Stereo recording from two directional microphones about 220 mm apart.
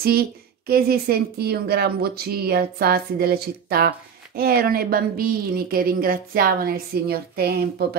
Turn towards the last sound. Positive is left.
turn(degrees=-45)  # may be behind; listen again after turning